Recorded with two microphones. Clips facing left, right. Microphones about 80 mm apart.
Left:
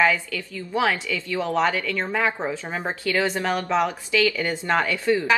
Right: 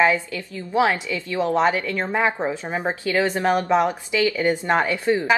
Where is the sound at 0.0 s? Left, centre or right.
Right.